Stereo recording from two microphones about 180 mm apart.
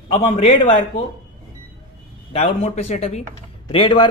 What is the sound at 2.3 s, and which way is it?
A woman's voice, 35° left (ahead or behind).